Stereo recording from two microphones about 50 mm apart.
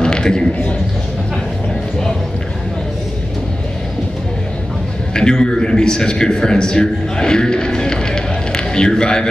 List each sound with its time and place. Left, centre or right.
0.0 s a man's voice: centre
5.1 s a man's voice: centre